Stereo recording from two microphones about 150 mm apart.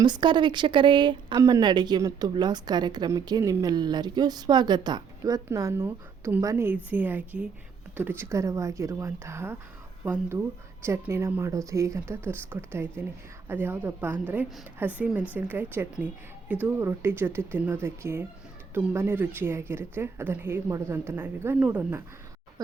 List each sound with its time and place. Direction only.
0.0 s speech: 30° right (ahead or behind); by 22.0 s 15° right (ahead or behind)